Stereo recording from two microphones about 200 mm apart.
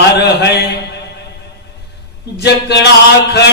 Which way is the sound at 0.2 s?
55° left (ahead or behind).